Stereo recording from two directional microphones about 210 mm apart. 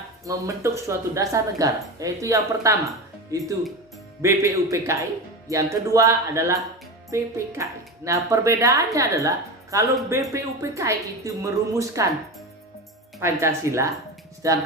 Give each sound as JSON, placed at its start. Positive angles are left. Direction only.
{"t": 0.3, "sound": "speech", "side_deg": -15}
{"t": 13.1, "sound": "speech", "side_deg": -15}